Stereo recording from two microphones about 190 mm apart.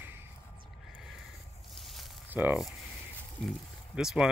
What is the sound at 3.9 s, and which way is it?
Speech, 5° right (ahead or behind).